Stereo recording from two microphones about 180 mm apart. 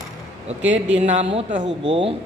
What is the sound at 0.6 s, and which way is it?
Speech, 90° right.